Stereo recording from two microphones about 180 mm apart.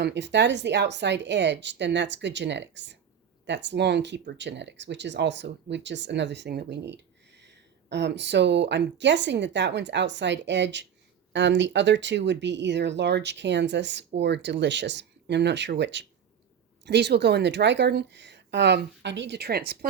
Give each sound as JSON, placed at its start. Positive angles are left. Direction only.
{"t": 0.0, "sound": "speech", "side_deg": -75}